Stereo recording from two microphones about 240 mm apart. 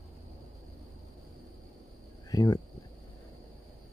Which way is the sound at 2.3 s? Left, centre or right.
Centre.